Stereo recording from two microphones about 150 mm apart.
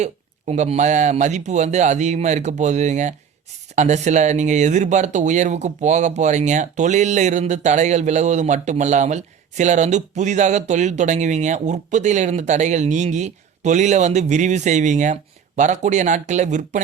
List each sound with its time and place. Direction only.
0.0 s speech: 50° right (ahead or behind)